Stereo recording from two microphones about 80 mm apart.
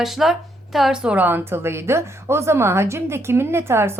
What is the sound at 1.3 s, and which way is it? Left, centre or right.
A woman's voice, right.